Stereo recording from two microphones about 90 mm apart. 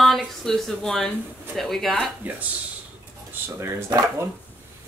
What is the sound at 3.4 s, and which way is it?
Speech, 30° right (ahead or behind).